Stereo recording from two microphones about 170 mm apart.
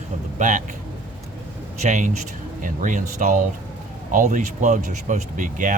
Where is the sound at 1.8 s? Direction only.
45° right (ahead or behind).